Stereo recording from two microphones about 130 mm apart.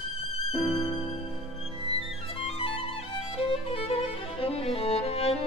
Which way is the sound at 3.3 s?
45° left (ahead or behind).